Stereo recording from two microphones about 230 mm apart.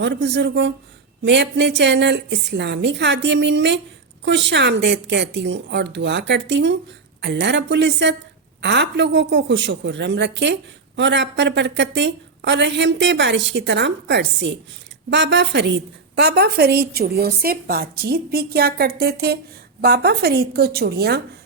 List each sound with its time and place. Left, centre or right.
0.0 s a woman's voice: right